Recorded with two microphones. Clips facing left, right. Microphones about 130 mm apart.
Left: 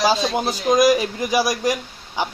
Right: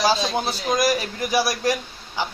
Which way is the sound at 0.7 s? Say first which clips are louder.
Left 6 dB; 15° left (ahead or behind).